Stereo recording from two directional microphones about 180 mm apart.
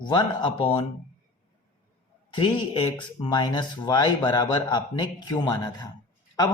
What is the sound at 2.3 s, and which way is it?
Speech, 30° left (ahead or behind).